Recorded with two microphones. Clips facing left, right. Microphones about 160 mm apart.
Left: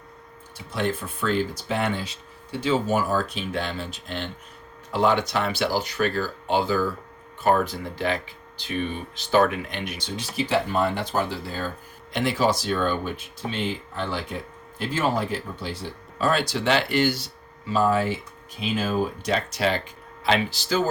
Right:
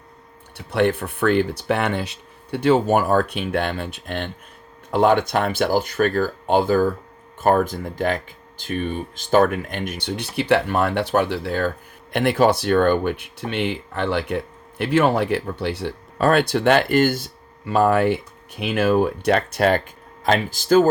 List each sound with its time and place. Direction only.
0.5 s speech: 65° right (ahead or behind); by 10.1 s 45° right (ahead or behind)
10.1 s speech: 65° right (ahead or behind); by 20.8 s 50° right (ahead or behind)